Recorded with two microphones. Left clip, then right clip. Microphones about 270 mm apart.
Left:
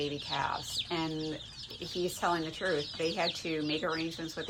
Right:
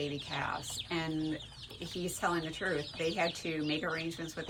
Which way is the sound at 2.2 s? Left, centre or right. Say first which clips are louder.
Left 2 dB; centre.